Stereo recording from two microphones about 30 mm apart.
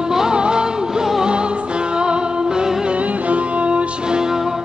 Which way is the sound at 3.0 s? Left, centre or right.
Right.